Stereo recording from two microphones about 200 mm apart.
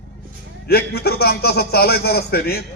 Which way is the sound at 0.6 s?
50° left (ahead or behind).